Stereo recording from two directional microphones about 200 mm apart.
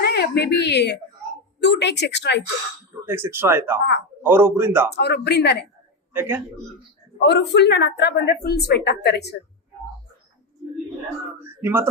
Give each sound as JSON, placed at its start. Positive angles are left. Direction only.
{"t": 0.0, "sound": "a woman's voice", "side_deg": 55}
{"t": 3.1, "sound": "a man's voice", "side_deg": -10}
{"t": 4.9, "sound": "a woman's voice", "side_deg": 55}
{"t": 6.1, "sound": "a man's voice", "side_deg": -10}
{"t": 7.2, "sound": "a woman's voice", "side_deg": 55}
{"t": 11.3, "sound": "speech", "side_deg": -10}